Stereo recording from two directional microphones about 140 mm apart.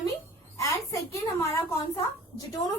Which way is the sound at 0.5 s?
25° left (ahead or behind).